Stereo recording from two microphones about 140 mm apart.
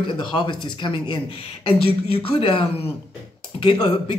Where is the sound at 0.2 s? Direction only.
35° left (ahead or behind).